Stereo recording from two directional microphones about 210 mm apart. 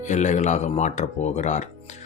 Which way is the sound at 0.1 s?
35° left (ahead or behind).